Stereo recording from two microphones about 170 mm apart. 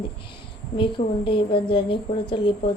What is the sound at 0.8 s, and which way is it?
A woman's voice, 30° left (ahead or behind).